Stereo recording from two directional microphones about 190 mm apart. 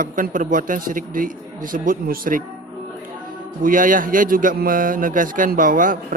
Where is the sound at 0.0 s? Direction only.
45° right (ahead or behind).